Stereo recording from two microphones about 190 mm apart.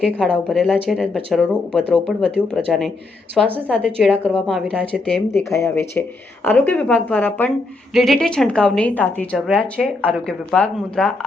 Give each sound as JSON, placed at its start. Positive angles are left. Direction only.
{"t": 0.0, "sound": "a woman's voice", "side_deg": 5}